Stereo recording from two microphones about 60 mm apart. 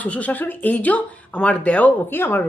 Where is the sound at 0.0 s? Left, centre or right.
Left.